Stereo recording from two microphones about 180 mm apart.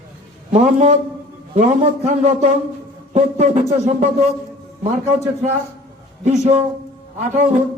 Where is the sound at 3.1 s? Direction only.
40° right (ahead or behind).